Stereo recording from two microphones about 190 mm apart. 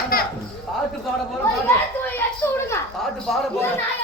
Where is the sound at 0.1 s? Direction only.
50° left (ahead or behind).